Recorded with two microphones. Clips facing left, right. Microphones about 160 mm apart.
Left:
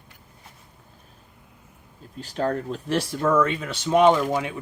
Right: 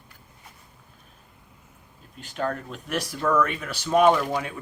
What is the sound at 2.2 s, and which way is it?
Speech, 35° left (ahead or behind).